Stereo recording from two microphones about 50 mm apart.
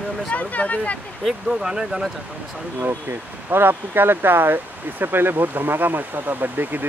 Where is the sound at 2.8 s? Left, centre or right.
Right.